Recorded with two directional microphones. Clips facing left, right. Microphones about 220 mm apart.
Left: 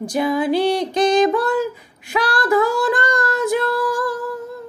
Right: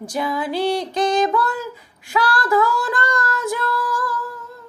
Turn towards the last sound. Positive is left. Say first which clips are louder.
# left 4 dB
turn(degrees=15)  # may be behind; listen again after turning